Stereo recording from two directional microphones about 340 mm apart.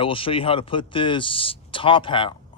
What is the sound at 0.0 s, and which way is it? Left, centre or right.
A man's voice, centre.